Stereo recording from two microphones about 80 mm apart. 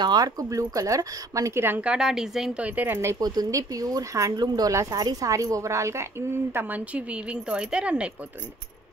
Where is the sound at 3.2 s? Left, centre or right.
Right.